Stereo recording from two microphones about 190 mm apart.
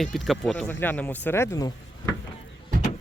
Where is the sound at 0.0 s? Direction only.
Centre (ahead or behind).